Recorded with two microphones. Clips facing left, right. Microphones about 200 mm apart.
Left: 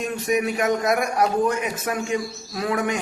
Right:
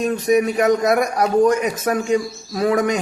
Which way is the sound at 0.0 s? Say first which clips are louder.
Right 6 dB; 35° right (ahead or behind).